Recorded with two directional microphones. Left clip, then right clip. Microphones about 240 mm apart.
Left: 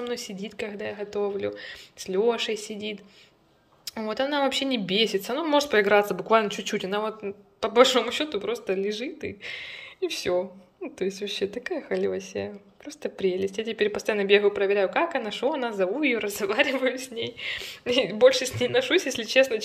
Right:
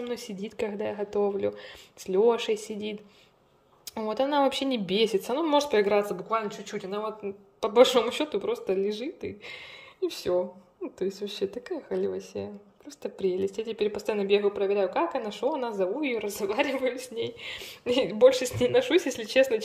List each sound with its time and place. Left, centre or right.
0.0 s a woman's voice: centre
6.1 s speech: left
7.2 s a woman's voice: centre